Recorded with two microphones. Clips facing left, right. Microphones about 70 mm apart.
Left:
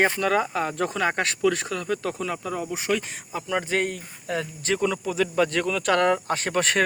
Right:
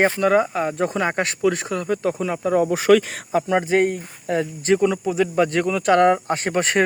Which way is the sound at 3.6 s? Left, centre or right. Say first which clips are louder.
Right 7 dB; right.